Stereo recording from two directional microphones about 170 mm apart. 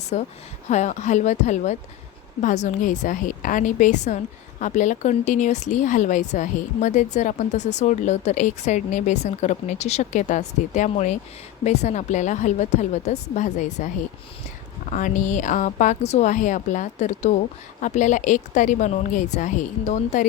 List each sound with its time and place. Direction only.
0.1 s speech: 45° left (ahead or behind)